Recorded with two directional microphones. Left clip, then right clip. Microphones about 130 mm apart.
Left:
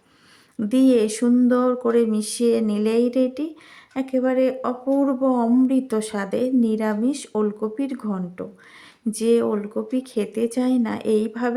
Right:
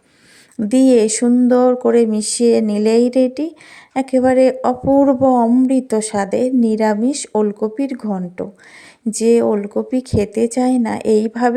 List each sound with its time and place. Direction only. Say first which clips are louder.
0.5 s speech: right 6 dB; 35° right (ahead or behind)